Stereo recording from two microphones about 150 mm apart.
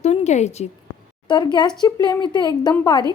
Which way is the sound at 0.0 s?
50° left (ahead or behind).